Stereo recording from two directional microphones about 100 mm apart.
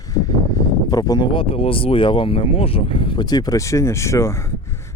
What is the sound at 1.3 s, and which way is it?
Speech, 70° left (ahead or behind).